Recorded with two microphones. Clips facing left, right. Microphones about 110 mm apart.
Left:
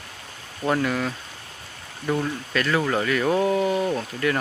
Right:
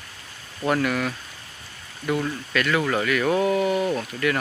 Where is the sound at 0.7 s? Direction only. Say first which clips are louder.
Even; 25° left (ahead or behind).